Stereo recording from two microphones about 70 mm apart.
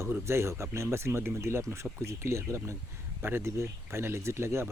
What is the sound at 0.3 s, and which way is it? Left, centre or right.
Speech, right.